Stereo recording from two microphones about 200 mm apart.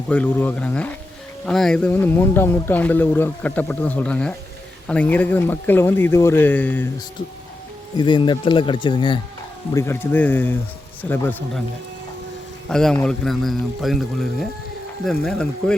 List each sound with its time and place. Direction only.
0.1 s speech: 5° left (ahead or behind)
7.9 s speech: 25° left (ahead or behind)
9.7 s speech: 10° left (ahead or behind)
12.6 s a man's voice: 5° left (ahead or behind)